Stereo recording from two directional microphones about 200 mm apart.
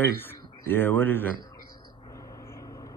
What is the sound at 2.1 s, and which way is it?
Vehicle, 15° left (ahead or behind).